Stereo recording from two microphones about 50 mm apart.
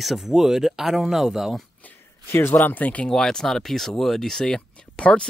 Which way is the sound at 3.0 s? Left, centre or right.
Centre.